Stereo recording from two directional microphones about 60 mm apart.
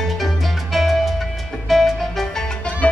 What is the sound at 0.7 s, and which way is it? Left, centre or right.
Music, centre.